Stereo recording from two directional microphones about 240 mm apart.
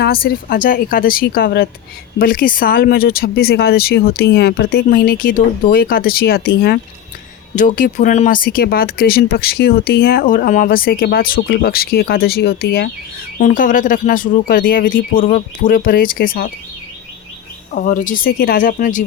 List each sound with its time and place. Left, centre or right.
0.0 s speech: left
13.4 s speech: left
17.7 s speech: left